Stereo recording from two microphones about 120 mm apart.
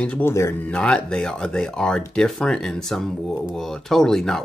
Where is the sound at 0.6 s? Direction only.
10° left (ahead or behind).